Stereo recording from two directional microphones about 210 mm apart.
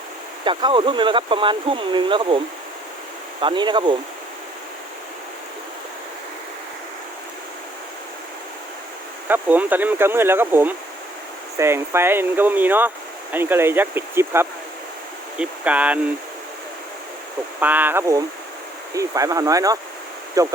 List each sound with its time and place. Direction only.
0.4 s speech: 25° right (ahead or behind)
3.4 s speech: 20° right (ahead or behind)
9.3 s speech: 10° right (ahead or behind)
17.6 s speech: 10° right (ahead or behind)